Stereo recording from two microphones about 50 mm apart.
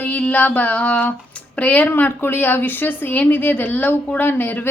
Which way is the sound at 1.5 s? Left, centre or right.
Left.